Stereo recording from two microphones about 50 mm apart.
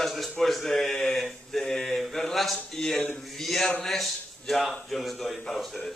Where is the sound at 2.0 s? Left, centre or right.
Centre.